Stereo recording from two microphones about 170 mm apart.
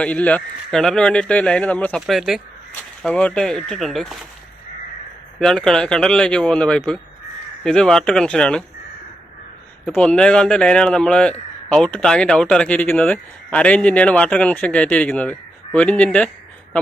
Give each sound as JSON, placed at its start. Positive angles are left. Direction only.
{"t": 0.0, "sound": "speech", "side_deg": 10}
{"t": 5.4, "sound": "speech", "side_deg": 5}
{"t": 9.8, "sound": "a man's voice", "side_deg": 5}